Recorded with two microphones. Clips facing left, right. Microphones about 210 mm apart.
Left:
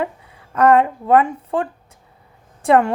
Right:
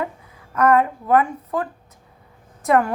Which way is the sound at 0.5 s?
30° left (ahead or behind).